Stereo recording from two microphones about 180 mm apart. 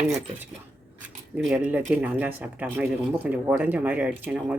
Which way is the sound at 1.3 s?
5° right (ahead or behind).